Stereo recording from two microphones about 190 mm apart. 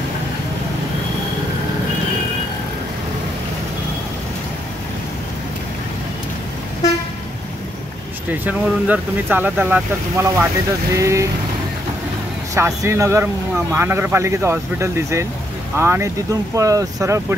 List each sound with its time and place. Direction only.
8.3 s speech: 10° right (ahead or behind)
12.5 s speech: 15° right (ahead or behind)